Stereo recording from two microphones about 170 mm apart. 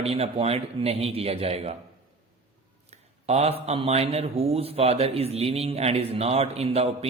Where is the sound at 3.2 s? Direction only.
40° right (ahead or behind).